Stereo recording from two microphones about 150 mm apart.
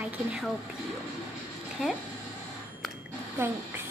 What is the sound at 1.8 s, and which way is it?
Speech, centre (ahead or behind).